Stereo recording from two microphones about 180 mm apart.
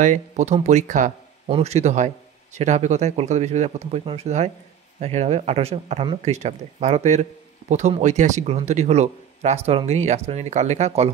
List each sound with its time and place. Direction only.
0.0 s speech: 40° right (ahead or behind)